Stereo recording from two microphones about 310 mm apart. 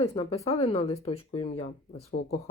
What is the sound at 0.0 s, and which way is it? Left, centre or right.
A woman's voice, centre.